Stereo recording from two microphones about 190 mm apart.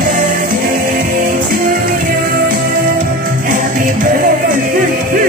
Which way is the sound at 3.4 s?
45° right (ahead or behind).